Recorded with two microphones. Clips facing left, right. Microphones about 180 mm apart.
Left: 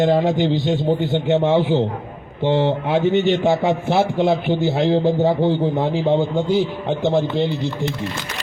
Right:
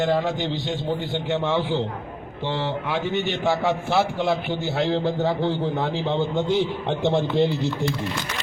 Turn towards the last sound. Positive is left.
turn(degrees=0)  # may be behind; listen again after turning